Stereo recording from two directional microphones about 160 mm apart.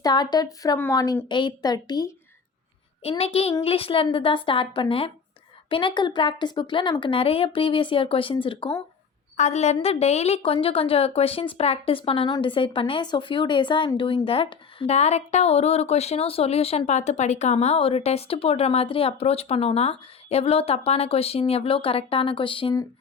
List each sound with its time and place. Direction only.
0.0 s a woman's voice: 25° left (ahead or behind)
3.0 s a woman's voice: 40° left (ahead or behind)
9.4 s a woman's voice: 45° left (ahead or behind)